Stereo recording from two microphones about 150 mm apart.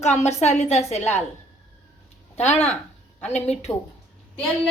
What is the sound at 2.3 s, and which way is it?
A woman's voice, 45° left (ahead or behind).